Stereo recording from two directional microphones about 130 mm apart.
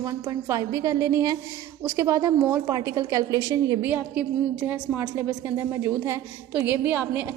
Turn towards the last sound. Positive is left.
turn(degrees=-15)  # may be behind; listen again after turning